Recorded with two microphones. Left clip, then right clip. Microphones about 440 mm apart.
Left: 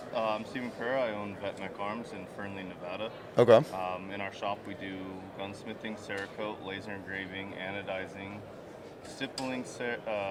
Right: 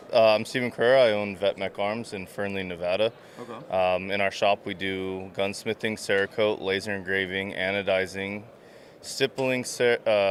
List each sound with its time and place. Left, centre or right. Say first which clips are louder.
0.1 s speech: right 13 dB; right